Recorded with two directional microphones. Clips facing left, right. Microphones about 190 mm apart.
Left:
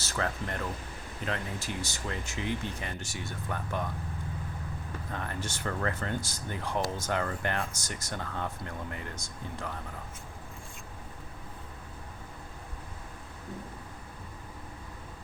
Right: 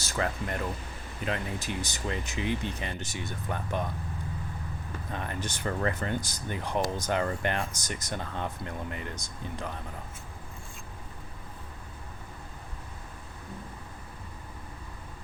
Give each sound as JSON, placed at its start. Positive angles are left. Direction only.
{"t": 0.0, "sound": "speech", "side_deg": -15}
{"t": 5.1, "sound": "speech", "side_deg": -20}